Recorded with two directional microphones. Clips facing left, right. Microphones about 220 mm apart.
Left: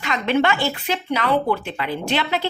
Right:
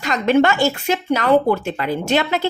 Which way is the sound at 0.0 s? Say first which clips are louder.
Right 4 dB; 40° right (ahead or behind).